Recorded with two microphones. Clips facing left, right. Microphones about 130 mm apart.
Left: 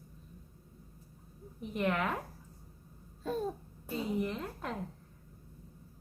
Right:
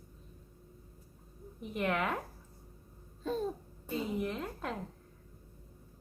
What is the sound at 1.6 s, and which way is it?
Speech, centre (ahead or behind).